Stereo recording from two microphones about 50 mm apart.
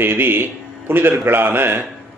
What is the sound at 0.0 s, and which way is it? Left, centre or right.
Speech, right.